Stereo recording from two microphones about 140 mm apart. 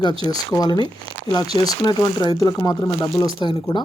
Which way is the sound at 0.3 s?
30° left (ahead or behind).